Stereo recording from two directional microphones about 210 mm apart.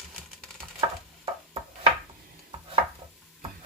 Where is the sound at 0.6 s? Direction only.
20° right (ahead or behind).